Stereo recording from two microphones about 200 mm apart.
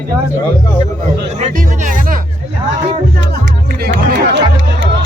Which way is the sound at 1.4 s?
40° right (ahead or behind).